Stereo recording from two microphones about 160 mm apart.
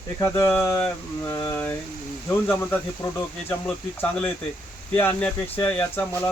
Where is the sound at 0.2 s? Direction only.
15° left (ahead or behind).